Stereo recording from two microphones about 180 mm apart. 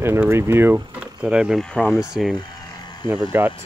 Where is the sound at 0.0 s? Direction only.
15° right (ahead or behind); by 2.0 s 5° left (ahead or behind).